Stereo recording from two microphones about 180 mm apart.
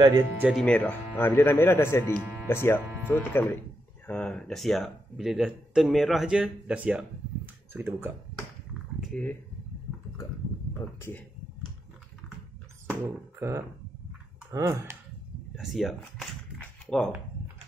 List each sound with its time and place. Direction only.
0.4 s speech: centre (ahead or behind)
2.1 s speech: 5° right (ahead or behind)
2.4 s speech: 15° left (ahead or behind); by 8.1 s 10° right (ahead or behind)
9.1 s speech: 10° left (ahead or behind)
11.0 s speech: 10° left (ahead or behind)
13.0 s speech: 15° right (ahead or behind)
15.5 s speech: centre (ahead or behind)